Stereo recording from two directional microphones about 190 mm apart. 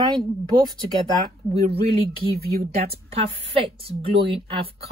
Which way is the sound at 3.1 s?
30° right (ahead or behind).